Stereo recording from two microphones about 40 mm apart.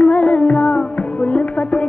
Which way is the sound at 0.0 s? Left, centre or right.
Left.